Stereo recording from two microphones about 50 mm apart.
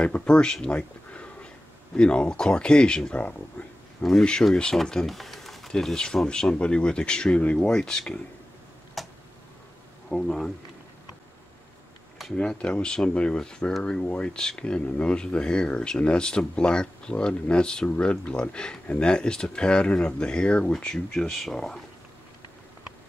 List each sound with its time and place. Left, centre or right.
0.0 s speech: left
5.0 s typing: centre
5.7 s speech: centre
9.0 s a sound: centre
10.0 s speech: centre
12.4 s speech: left